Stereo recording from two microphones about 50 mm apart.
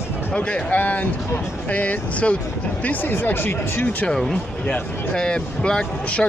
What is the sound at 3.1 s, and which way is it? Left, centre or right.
Speech, left.